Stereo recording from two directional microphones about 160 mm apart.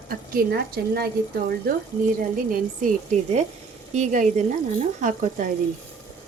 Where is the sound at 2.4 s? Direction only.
65° right (ahead or behind).